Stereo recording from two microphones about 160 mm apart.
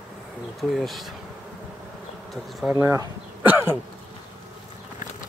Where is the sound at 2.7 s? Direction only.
15° right (ahead or behind).